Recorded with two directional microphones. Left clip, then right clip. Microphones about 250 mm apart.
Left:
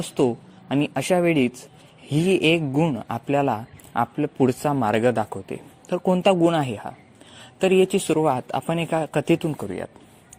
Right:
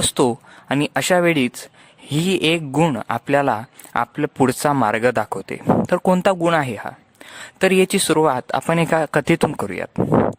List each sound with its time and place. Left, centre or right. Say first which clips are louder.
0.2 s speech: left 1 dB; right
8.0 s speech: right 4 dB; right